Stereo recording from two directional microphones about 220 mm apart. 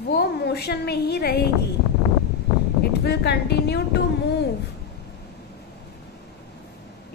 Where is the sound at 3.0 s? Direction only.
50° left (ahead or behind).